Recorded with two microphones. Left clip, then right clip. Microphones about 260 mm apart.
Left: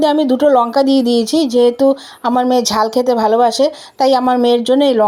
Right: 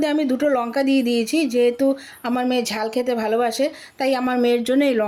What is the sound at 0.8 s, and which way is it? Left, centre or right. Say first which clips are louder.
Speech: left 7 dB; centre.